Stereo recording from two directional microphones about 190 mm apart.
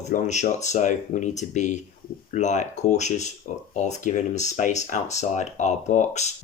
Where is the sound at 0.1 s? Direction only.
40° left (ahead or behind).